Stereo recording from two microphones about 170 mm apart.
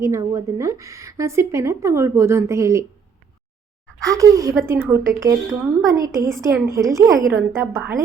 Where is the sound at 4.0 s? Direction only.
20° right (ahead or behind).